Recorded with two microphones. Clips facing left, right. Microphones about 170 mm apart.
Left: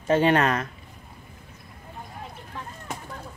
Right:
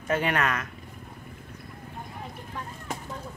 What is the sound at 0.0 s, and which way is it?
Speech, 30° left (ahead or behind).